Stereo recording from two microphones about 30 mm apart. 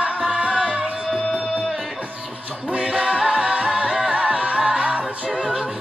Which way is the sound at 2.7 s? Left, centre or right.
Right.